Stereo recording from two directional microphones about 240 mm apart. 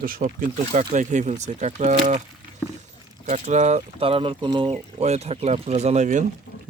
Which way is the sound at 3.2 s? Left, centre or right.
Right.